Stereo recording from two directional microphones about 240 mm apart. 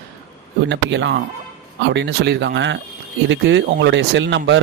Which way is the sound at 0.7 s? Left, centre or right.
Right.